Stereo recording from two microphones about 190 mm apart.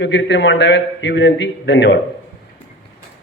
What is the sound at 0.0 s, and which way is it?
A man's voice, 70° left (ahead or behind).